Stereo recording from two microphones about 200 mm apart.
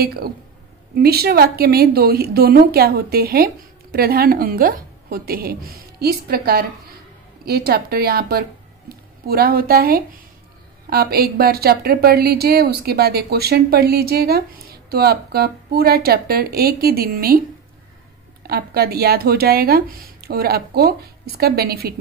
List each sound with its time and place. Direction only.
0.0 s speech: 50° right (ahead or behind)
18.4 s speech: 50° right (ahead or behind)